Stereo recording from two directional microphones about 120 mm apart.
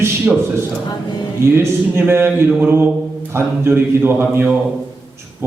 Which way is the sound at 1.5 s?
20° right (ahead or behind).